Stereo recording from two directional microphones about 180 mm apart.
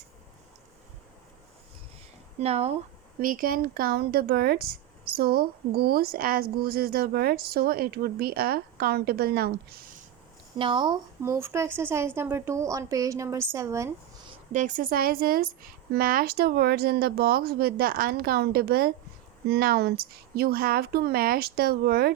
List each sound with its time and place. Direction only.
2.4 s speech: 35° right (ahead or behind)
3.2 s speech: 50° right (ahead or behind)
10.6 s a woman's voice: 25° right (ahead or behind)
14.5 s speech: 45° right (ahead or behind)